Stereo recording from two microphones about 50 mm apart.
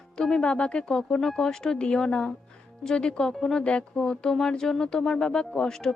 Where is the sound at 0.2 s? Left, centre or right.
Centre.